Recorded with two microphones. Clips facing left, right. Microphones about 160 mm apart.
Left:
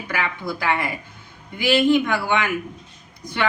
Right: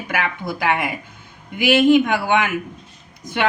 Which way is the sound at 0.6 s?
20° right (ahead or behind).